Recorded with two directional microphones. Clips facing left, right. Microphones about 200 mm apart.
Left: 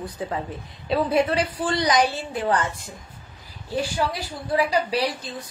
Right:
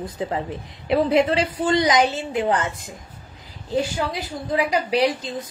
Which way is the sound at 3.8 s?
20° right (ahead or behind).